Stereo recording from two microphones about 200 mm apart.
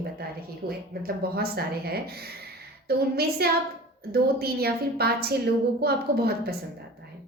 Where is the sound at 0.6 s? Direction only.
50° right (ahead or behind).